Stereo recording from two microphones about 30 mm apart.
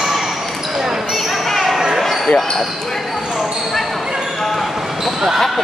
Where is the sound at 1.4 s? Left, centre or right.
Centre.